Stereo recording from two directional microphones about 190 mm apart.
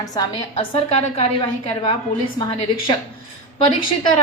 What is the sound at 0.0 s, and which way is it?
A woman's voice, 20° left (ahead or behind).